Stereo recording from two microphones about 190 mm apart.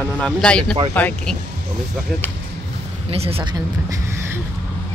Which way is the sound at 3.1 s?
30° right (ahead or behind).